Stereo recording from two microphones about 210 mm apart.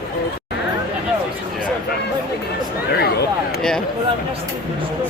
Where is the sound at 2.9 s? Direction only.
50° left (ahead or behind).